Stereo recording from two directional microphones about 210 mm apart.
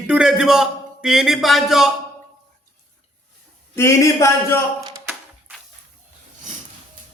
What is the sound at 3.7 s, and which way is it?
Speech, 15° left (ahead or behind).